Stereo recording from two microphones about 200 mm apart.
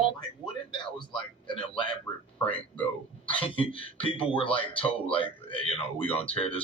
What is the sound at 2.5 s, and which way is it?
Speech, 5° left (ahead or behind).